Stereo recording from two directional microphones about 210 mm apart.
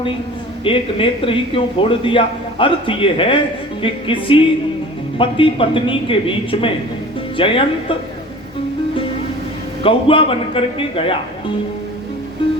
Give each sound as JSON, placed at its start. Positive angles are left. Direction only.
{"t": 0.6, "sound": "a man's voice", "side_deg": 25}
{"t": 9.8, "sound": "a man's voice", "side_deg": 25}